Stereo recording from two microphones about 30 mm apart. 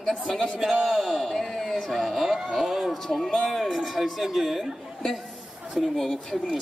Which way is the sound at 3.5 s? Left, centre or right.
Centre.